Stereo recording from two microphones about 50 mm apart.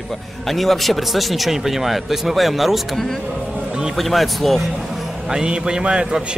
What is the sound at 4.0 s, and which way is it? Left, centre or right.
Speech, centre.